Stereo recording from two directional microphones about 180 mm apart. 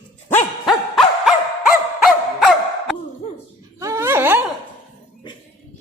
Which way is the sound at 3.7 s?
20° right (ahead or behind).